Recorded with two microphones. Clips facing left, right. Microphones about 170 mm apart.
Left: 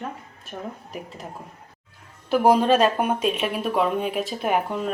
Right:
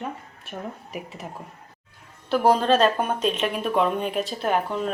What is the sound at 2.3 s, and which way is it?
Speech, 10° left (ahead or behind).